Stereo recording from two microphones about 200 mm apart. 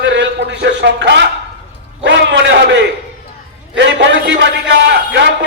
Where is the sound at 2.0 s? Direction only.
65° right (ahead or behind).